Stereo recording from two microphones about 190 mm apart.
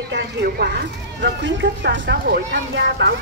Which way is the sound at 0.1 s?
65° right (ahead or behind).